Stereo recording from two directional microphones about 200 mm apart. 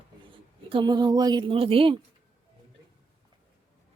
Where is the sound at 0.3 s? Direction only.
25° right (ahead or behind).